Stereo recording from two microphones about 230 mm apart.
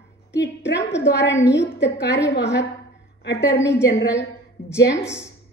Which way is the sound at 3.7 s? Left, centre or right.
Left.